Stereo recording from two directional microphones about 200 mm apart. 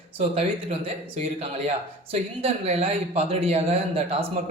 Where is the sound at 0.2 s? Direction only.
30° right (ahead or behind).